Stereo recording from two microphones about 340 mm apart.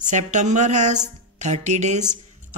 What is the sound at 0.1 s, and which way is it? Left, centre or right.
Speech, right.